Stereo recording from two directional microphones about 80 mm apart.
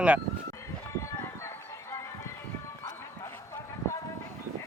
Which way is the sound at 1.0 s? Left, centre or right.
Left.